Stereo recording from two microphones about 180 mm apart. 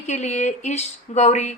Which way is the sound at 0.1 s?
40° left (ahead or behind).